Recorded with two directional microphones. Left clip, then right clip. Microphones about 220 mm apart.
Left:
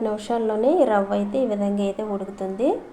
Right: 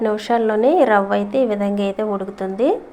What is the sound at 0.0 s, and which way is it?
A woman's voice, 20° right (ahead or behind).